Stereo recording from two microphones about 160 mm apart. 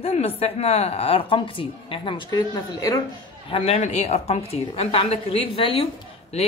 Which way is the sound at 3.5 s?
45° left (ahead or behind).